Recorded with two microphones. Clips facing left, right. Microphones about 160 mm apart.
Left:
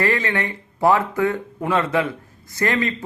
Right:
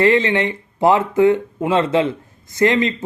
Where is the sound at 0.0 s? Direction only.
20° right (ahead or behind).